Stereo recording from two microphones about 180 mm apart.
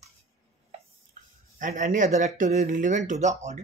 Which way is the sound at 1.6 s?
50° right (ahead or behind).